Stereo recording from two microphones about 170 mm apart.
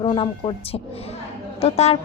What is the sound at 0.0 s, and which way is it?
Speech, 25° left (ahead or behind).